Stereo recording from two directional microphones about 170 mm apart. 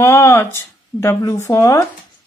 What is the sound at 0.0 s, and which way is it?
Speech, 15° left (ahead or behind).